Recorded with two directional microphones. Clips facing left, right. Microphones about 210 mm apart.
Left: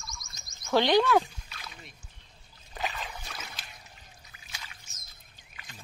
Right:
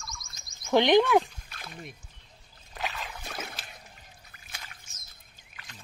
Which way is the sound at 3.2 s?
55° right (ahead or behind).